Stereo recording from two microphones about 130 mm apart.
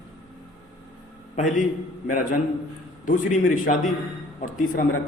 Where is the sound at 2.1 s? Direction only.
85° left.